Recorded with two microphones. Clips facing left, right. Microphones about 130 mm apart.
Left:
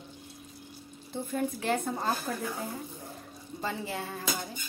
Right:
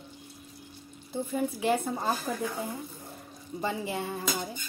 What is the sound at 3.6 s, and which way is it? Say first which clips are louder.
Speech: right 3 dB; 20° right (ahead or behind).